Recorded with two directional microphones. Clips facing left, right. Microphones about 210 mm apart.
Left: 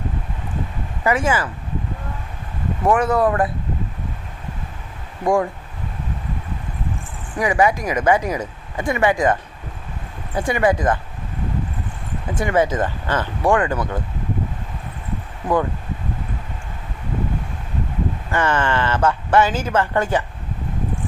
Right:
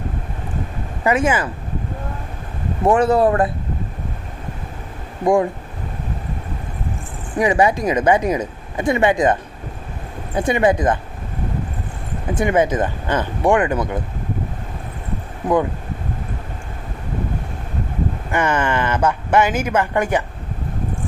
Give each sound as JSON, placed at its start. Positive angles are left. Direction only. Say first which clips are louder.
{"t": 1.0, "sound": "speech", "louder": "right 2 dB", "side_deg": -20}
{"t": 2.8, "sound": "speech", "louder": "right 3 dB", "side_deg": -30}
{"t": 5.2, "sound": "speech", "louder": "right 3 dB", "side_deg": -20}
{"t": 7.3, "sound": "speech", "louder": "right 2 dB", "side_deg": -25}
{"t": 12.3, "sound": "speech", "louder": "right 2 dB", "side_deg": -20}
{"t": 18.3, "sound": "speech", "louder": "right 1 dB", "side_deg": -15}